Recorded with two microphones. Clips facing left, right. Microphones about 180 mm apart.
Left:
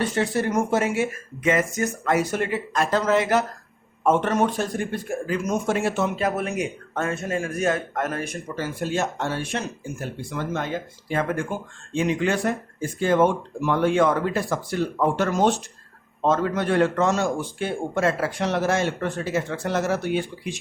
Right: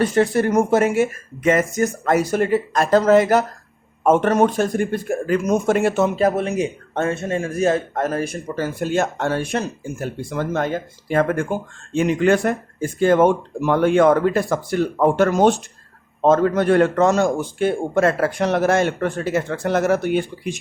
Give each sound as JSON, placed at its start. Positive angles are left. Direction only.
{"t": 0.0, "sound": "speech", "side_deg": -50}
{"t": 6.1, "sound": "a man's voice", "side_deg": -30}